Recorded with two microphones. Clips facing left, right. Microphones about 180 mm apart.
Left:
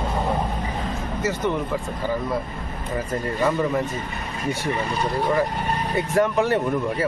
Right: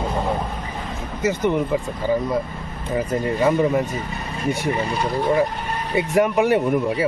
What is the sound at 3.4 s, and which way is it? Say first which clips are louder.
Speech: right 3 dB; 20° right (ahead or behind).